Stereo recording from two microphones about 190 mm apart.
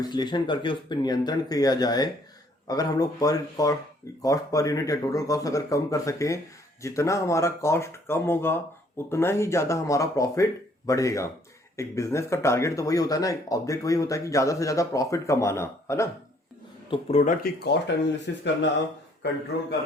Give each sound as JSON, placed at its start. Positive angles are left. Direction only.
{"t": 0.0, "sound": "speech", "side_deg": 20}
{"t": 16.9, "sound": "speech", "side_deg": 35}
{"t": 17.6, "sound": "speech", "side_deg": 65}